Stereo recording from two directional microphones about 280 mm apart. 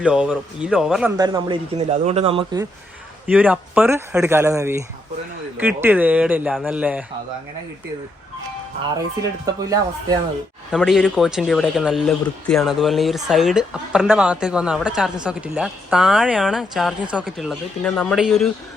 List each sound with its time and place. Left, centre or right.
0.0 s a man's voice: centre
1.1 s a man's voice: centre
3.2 s a man's voice: centre
9.6 s a man's voice: centre
10.7 s a man's voice: centre